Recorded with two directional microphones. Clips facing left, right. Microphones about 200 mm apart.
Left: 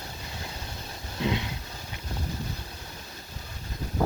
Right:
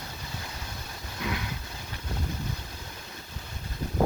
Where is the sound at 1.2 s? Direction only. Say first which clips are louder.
Left 5 dB; 25° left (ahead or behind).